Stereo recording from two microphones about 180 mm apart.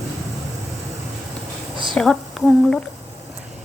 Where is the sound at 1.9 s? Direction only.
Centre (ahead or behind).